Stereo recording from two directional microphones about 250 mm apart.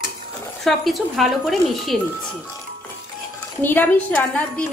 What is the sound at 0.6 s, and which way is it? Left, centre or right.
A woman's voice, centre.